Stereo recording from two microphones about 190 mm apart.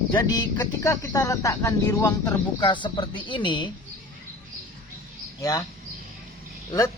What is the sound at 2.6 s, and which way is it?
Speech, 25° left (ahead or behind).